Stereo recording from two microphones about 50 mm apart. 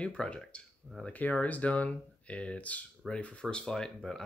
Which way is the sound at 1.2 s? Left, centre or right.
Left.